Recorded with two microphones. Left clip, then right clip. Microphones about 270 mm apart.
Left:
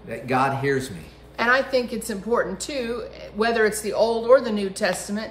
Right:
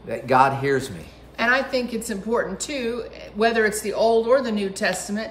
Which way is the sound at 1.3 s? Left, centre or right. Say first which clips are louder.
Left 1 dB; centre.